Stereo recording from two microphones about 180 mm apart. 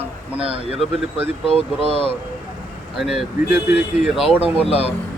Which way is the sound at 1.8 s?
30° left (ahead or behind).